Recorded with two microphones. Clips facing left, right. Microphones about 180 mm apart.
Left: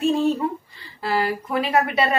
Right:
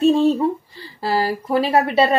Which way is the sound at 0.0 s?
30° right (ahead or behind).